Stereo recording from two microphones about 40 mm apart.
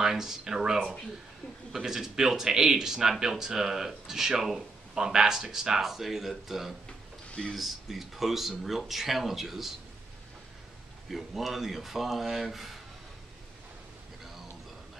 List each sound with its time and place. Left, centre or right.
0.0 s speech: centre
7.2 s a sound: left
7.5 s speech: centre
11.1 s speech: centre